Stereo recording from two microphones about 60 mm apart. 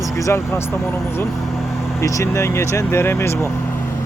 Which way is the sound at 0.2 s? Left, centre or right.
Left.